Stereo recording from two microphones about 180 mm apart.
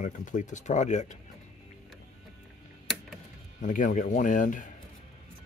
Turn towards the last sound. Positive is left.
turn(degrees=45)  # may be behind; listen again after turning